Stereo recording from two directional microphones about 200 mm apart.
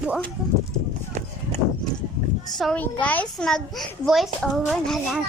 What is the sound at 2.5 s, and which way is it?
A child's voice, 5° left (ahead or behind).